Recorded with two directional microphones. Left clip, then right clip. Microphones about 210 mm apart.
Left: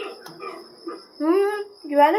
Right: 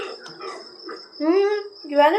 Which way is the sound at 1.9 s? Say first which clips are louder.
Even; 10° left (ahead or behind).